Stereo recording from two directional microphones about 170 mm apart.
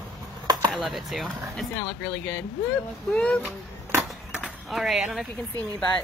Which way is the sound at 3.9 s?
5° right (ahead or behind).